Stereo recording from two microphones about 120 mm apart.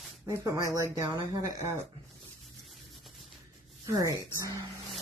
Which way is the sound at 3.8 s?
25° right (ahead or behind).